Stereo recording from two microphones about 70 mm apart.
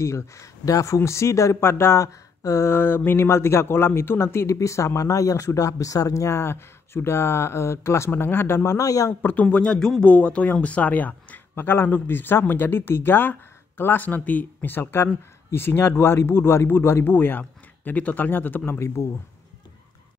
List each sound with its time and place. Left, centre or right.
0.0 s speech: left
2.4 s speech: left
2.7 s speech: left
8.6 s speech: left
9.2 s speech: left